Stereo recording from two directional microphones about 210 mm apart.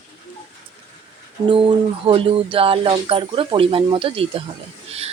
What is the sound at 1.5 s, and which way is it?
Speech, 25° right (ahead or behind).